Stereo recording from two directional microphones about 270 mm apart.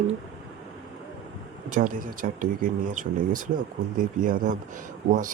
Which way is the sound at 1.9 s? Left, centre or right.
Right.